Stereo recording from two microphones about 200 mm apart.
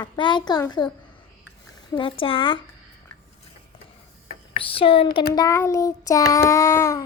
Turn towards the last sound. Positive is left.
turn(degrees=15)  # may be behind; listen again after turning